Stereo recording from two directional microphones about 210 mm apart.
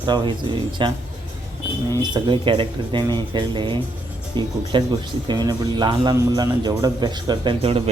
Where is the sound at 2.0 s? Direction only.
20° right (ahead or behind).